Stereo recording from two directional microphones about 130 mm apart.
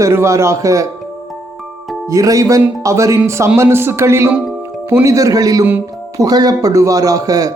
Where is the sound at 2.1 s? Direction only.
25° right (ahead or behind).